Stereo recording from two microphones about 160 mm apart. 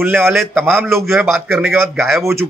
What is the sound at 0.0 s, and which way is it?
A man's voice, 10° right (ahead or behind).